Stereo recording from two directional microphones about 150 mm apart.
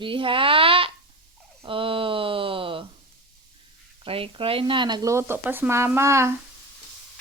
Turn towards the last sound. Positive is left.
turn(degrees=-20)  # may be behind; listen again after turning